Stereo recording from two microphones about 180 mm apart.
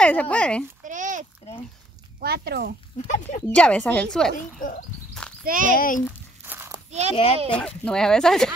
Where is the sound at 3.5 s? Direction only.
5° left (ahead or behind).